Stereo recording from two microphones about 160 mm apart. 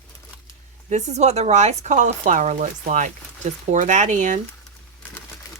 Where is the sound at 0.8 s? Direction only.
45° right (ahead or behind).